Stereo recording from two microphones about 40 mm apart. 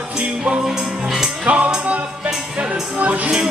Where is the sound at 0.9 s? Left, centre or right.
Centre.